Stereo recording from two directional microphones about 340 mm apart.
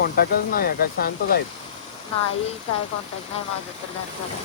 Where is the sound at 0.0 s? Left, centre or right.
Left.